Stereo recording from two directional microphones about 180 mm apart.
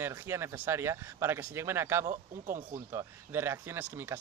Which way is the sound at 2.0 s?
45° right (ahead or behind).